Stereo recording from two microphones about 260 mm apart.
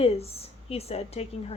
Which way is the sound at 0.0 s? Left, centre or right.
Left.